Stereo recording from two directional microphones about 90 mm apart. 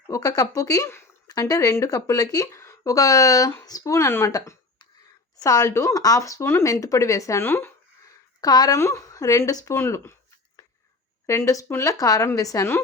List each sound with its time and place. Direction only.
0.1 s speech: 40° left (ahead or behind)
1.3 s speech: 45° left (ahead or behind)
4.3 s speech: 40° left (ahead or behind); by 7.7 s 25° left (ahead or behind)
8.4 s a woman's voice: 45° left (ahead or behind)
8.8 s speech: 30° left (ahead or behind)
11.3 s speech: 35° left (ahead or behind)